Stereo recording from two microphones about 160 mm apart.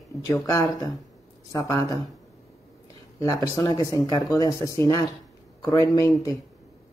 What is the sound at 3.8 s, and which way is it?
Speech, 25° left (ahead or behind).